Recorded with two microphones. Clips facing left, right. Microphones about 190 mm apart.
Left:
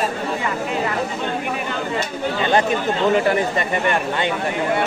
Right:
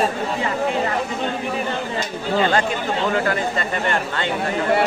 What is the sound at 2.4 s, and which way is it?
Speech, 20° left (ahead or behind).